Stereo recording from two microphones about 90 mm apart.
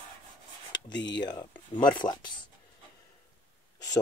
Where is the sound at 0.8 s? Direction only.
55° left (ahead or behind).